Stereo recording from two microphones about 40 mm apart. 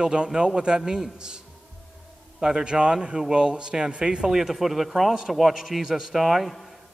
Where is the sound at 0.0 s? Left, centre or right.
Right.